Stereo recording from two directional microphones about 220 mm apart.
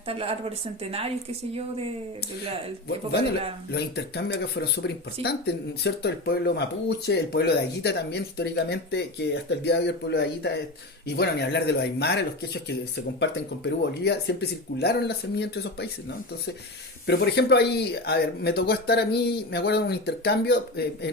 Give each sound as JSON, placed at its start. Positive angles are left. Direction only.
{"t": 0.1, "sound": "a woman's voice", "side_deg": -25}
{"t": 3.7, "sound": "speech", "side_deg": 50}